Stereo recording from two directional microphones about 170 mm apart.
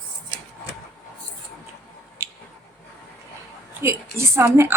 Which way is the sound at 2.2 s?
15° right (ahead or behind).